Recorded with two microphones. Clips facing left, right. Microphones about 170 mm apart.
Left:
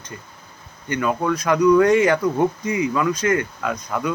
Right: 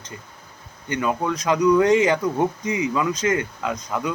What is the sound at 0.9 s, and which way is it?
Speech, 20° right (ahead or behind).